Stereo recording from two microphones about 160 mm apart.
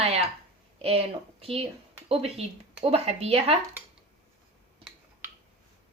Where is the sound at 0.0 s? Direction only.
40° right (ahead or behind).